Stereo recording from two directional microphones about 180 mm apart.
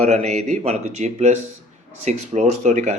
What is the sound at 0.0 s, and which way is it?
Speech, 40° right (ahead or behind).